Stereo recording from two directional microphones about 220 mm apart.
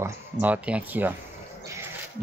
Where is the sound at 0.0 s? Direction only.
5° right (ahead or behind).